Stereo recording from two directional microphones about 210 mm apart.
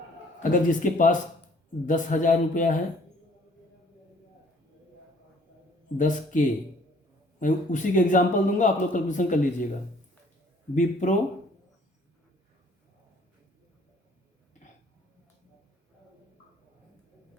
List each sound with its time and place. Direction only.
0.5 s a man's voice: 40° left (ahead or behind)
6.0 s a man's voice: 40° left (ahead or behind)
10.8 s a man's voice: 35° left (ahead or behind)